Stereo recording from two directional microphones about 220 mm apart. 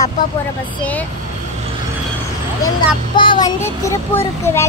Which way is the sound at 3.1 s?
20° left (ahead or behind).